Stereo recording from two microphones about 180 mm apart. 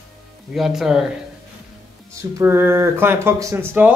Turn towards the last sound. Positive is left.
turn(degrees=-10)  # may be behind; listen again after turning